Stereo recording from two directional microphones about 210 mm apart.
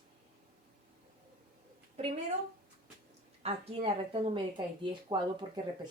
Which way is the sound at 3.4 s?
30° right (ahead or behind).